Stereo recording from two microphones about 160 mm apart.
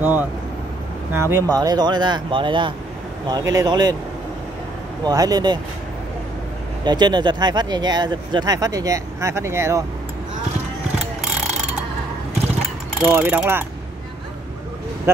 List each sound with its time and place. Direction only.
0.0 s mechanisms: 10° right (ahead or behind)
1.1 s speech: 15° right (ahead or behind)
5.0 s speech: 25° right (ahead or behind)
6.8 s speech: 25° right (ahead or behind)
13.0 s mechanisms: 10° right (ahead or behind)